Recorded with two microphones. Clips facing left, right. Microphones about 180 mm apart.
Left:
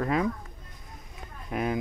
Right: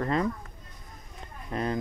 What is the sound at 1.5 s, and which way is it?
Speech, 10° left (ahead or behind).